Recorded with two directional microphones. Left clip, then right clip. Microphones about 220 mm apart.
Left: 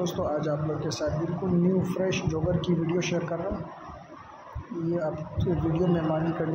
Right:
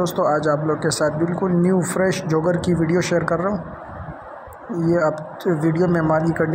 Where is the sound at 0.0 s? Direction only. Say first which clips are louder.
Right 10 dB; 25° right (ahead or behind).